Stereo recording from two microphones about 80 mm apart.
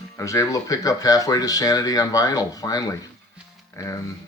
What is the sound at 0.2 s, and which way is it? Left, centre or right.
Speech, left.